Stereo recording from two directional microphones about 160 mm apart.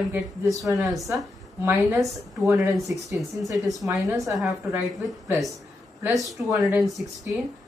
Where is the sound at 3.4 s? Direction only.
20° right (ahead or behind).